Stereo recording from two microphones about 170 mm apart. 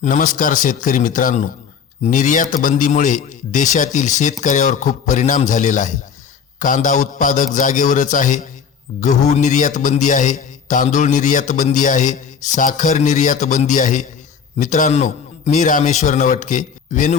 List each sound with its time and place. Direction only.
0.0 s a man's voice: 50° left (ahead or behind)